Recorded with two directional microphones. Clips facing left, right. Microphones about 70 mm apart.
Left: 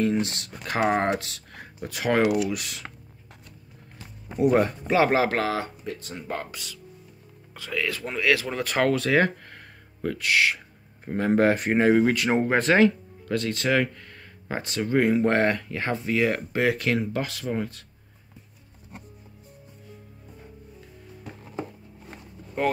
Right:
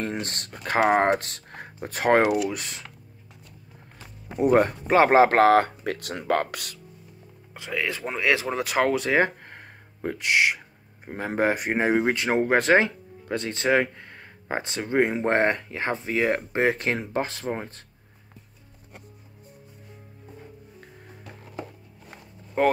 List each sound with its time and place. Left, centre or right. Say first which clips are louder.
0.0 s speech: left 6 dB; right
4.4 s speech: right 1 dB; right
5.9 s speech: right 7 dB; right
7.5 s speech: even; centre
11.1 s speech: left 3 dB; centre; by 17.8 s right